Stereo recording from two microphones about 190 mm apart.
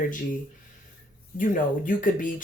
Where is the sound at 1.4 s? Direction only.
45° left (ahead or behind).